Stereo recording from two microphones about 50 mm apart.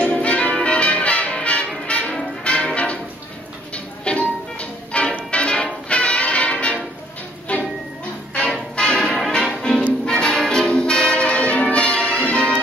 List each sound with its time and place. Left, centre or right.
0.0 s change ringing: left
0.7 s music: left
8.7 s music: centre